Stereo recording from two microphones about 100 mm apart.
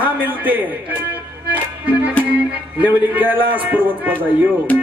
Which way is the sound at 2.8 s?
15° right (ahead or behind).